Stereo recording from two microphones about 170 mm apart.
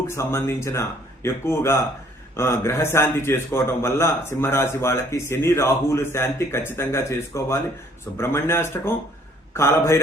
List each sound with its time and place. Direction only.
0.1 s a man's voice: 15° left (ahead or behind)